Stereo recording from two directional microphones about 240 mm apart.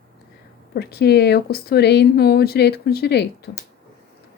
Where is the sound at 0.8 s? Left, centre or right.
Left.